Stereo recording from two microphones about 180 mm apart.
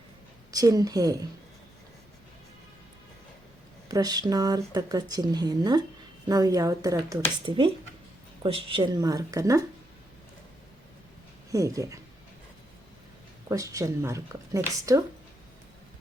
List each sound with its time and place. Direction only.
0.5 s speech: 20° right (ahead or behind)
3.8 s speech: 20° right (ahead or behind)
11.5 s speech: 20° right (ahead or behind)
13.5 s speech: 20° right (ahead or behind)